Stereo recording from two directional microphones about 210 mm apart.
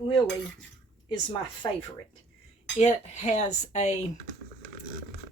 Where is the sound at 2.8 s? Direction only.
35° left (ahead or behind).